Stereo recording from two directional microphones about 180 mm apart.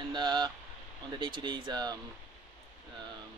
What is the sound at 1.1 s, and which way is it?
Speech, 25° right (ahead or behind).